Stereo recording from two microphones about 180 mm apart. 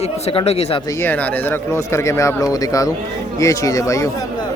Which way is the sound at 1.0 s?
10° left (ahead or behind).